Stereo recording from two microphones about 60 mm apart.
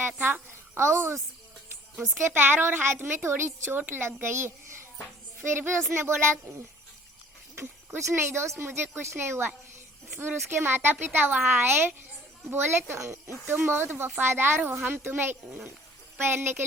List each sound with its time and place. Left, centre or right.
0.2 s a woman's voice: right
0.8 s speech: right
2.1 s a woman's voice: right
7.5 s a woman's voice: right